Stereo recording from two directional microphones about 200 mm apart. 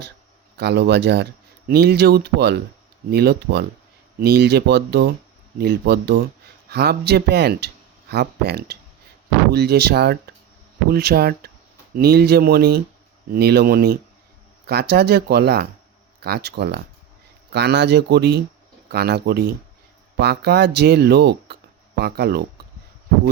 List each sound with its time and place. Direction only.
0.5 s speech: 55° right (ahead or behind)